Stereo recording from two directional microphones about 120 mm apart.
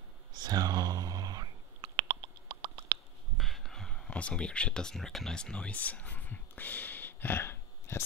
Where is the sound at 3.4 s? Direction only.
Centre (ahead or behind).